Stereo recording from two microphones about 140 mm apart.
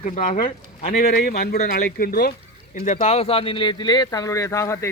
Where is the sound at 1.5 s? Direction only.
80° left.